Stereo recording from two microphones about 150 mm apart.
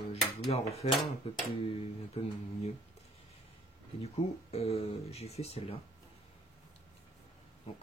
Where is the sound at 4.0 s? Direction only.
45° left (ahead or behind).